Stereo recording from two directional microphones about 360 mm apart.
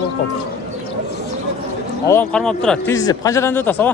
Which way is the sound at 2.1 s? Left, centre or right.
Centre.